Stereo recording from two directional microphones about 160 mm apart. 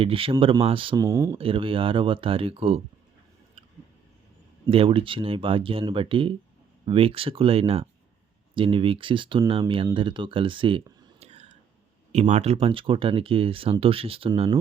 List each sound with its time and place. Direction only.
0.0 s speech: 35° right (ahead or behind)
0.9 s speech: 20° right (ahead or behind)
1.4 s speech: 35° right (ahead or behind)
4.7 s speech: 35° right (ahead or behind)